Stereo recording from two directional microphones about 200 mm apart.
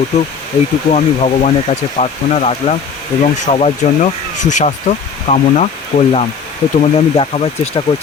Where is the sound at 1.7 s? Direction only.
35° left (ahead or behind).